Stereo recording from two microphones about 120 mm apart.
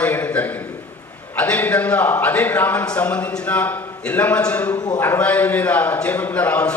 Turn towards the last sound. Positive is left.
turn(degrees=10)  # may be behind; listen again after turning